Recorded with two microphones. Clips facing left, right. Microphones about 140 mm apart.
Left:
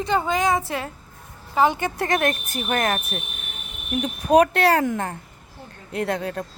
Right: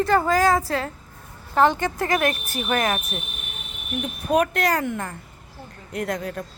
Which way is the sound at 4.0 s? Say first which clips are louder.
Left 5 dB; 35° left (ahead or behind).